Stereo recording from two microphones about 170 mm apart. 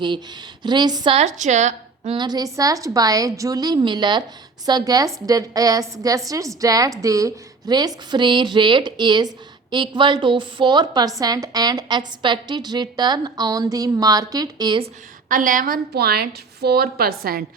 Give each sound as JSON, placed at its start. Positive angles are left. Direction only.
{"t": 0.6, "sound": "a woman's voice", "side_deg": -25}
{"t": 1.1, "sound": "a woman's voice", "side_deg": -40}
{"t": 2.1, "sound": "a woman's voice", "side_deg": -25}
{"t": 15.3, "sound": "a woman's voice", "side_deg": -50}